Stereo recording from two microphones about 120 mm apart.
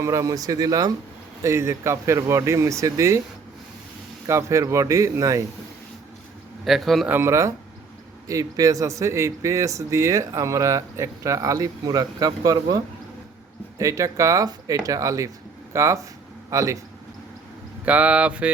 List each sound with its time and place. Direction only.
0.0 s speech: 25° right (ahead or behind)
4.3 s speech: 25° right (ahead or behind)
6.7 s a man's voice: centre (ahead or behind)
7.1 s a man's voice: 20° right (ahead or behind)
17.8 s speech: 10° right (ahead or behind)